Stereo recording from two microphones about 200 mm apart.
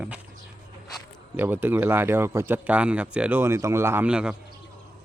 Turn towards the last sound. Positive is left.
turn(degrees=-5)  # may be behind; listen again after turning